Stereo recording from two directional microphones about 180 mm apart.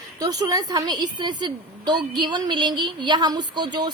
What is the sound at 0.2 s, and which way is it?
A woman's voice, 20° right (ahead or behind).